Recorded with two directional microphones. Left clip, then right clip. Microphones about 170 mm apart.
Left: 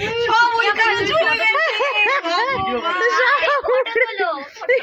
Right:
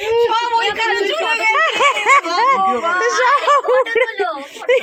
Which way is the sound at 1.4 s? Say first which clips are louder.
Right 3 dB; centre (ahead or behind).